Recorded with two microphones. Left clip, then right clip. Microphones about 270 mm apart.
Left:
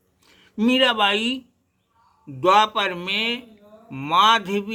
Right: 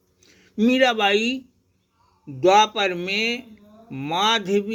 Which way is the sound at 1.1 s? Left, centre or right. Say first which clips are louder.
Right 1 dB; centre.